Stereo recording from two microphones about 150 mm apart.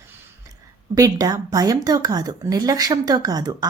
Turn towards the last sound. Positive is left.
turn(degrees=-25)  # may be behind; listen again after turning